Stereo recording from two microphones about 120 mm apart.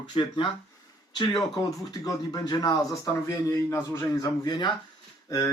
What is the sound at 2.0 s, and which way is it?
Speech, 30° left (ahead or behind).